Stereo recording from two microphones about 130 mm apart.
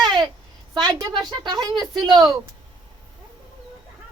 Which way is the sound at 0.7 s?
30° right (ahead or behind).